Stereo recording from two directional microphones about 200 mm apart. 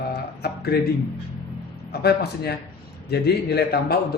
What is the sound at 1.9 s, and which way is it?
A man's voice, 55° left (ahead or behind).